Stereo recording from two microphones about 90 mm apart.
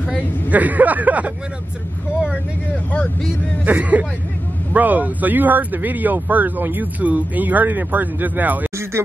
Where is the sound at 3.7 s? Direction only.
15° right (ahead or behind).